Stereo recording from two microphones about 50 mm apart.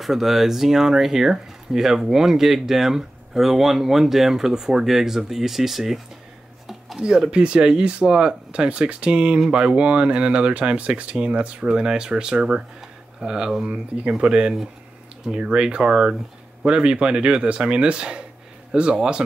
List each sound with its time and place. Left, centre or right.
0.0 s speech: centre
7.0 s speech: centre